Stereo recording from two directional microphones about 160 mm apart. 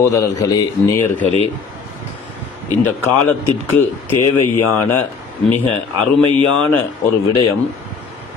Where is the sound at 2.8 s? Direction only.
15° left (ahead or behind).